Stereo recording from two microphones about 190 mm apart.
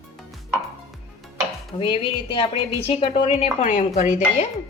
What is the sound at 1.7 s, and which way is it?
Speech, 30° left (ahead or behind).